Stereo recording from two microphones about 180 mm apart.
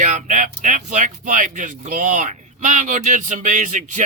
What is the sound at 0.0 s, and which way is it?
Speech, 45° right (ahead or behind).